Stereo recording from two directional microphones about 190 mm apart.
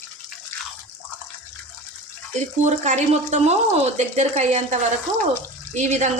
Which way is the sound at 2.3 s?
40° right (ahead or behind).